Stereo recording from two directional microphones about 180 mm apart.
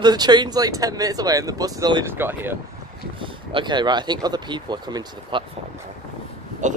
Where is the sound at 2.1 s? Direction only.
10° right (ahead or behind).